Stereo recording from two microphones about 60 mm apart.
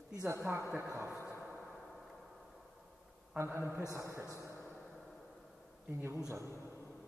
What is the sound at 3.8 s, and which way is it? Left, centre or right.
Speech, right.